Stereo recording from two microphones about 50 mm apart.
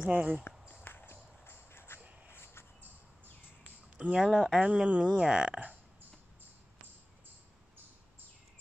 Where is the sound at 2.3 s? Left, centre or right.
Left.